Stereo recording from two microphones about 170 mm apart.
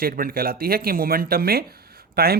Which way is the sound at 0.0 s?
60° right (ahead or behind).